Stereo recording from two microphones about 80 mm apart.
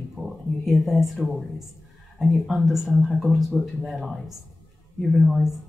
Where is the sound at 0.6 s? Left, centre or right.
Centre.